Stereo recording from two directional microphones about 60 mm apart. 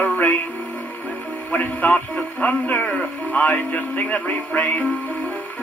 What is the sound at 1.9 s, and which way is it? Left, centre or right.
Speech, centre.